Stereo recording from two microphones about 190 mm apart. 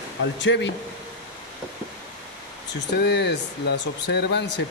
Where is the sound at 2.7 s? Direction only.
65° left (ahead or behind).